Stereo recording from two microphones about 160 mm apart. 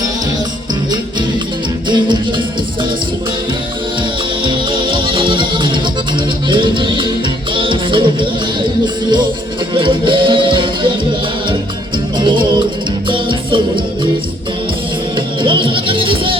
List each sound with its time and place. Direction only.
4.4 s music: 30° right (ahead or behind)
9.7 s music: 30° right (ahead or behind)
12.2 s music: 30° right (ahead or behind)
15.4 s music: 30° right (ahead or behind)